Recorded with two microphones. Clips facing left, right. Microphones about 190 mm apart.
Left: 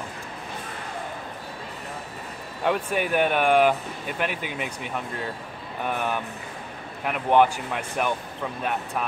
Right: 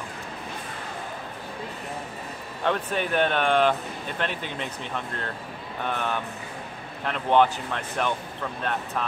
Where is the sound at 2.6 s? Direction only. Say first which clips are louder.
Left 2 dB; 10° left (ahead or behind).